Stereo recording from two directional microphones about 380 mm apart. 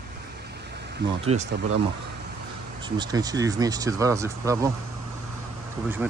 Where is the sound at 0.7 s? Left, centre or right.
Right.